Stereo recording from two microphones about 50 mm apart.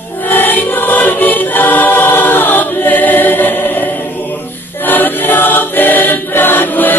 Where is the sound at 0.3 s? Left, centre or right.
Left.